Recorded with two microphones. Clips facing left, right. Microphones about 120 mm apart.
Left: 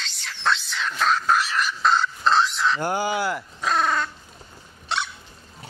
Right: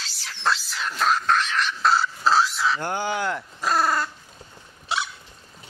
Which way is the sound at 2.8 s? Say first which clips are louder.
Left 2 dB; 10° left (ahead or behind).